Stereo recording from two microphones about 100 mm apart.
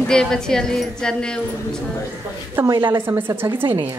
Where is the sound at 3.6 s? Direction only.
55° right (ahead or behind).